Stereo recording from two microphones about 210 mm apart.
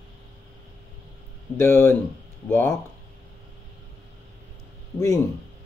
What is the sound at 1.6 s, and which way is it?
Speech, 10° left (ahead or behind).